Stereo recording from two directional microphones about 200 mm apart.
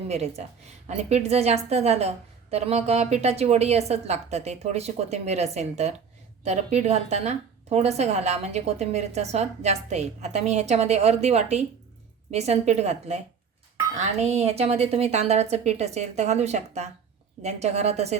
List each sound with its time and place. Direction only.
0.1 s a woman's voice: 30° right (ahead or behind)